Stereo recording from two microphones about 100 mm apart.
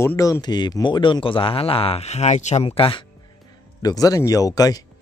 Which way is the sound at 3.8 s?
40° left (ahead or behind).